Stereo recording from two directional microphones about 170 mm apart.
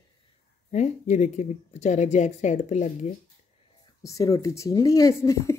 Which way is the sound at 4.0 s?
20° left (ahead or behind).